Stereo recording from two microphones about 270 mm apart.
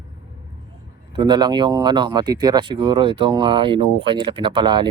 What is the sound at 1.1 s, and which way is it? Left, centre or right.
Speech, centre.